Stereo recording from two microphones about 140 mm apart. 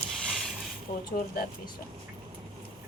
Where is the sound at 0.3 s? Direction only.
Centre (ahead or behind).